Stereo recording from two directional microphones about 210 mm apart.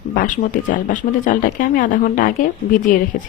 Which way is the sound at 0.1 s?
40° left (ahead or behind).